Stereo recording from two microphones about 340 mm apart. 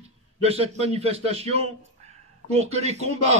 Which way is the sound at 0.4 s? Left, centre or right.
Centre.